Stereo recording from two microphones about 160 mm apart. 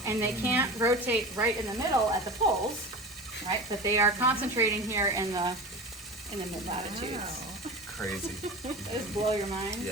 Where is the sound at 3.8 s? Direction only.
15° right (ahead or behind).